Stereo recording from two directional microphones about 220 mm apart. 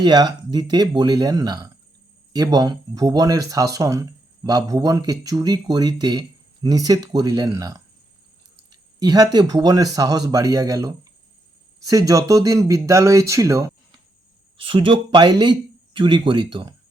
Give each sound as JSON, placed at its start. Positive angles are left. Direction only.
{"t": 0.0, "sound": "speech", "side_deg": -20}